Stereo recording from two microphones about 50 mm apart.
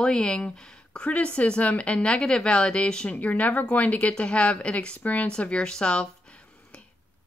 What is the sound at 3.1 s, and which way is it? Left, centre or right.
Speech, left.